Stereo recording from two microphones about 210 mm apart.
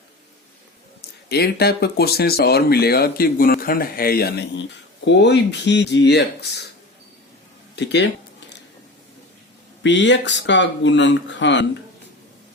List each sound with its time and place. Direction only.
1.3 s speech: 50° left (ahead or behind)
7.8 s speech: 55° left (ahead or behind)
9.8 s speech: 60° left (ahead or behind)